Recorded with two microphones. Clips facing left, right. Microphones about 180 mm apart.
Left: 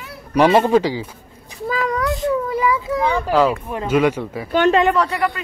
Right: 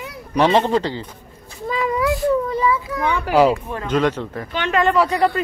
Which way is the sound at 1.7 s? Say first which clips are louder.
Right 1 dB; centre (ahead or behind).